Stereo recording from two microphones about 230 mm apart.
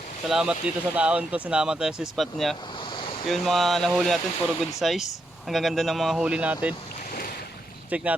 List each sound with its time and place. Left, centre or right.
0.3 s speech: centre
2.9 s ocean: left
3.2 s speech: centre
7.9 s speech: centre